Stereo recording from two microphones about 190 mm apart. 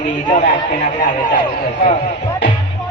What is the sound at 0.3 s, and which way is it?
A man's voice, 40° left (ahead or behind).